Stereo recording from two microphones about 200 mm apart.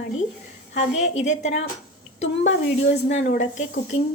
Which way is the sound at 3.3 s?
35° left (ahead or behind).